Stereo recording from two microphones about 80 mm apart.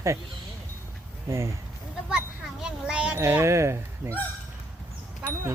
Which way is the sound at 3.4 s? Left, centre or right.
Right.